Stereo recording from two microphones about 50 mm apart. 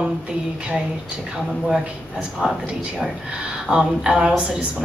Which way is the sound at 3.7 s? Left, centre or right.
Centre.